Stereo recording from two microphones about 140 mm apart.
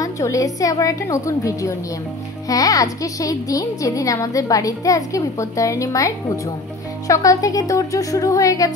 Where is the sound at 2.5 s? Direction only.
25° left (ahead or behind).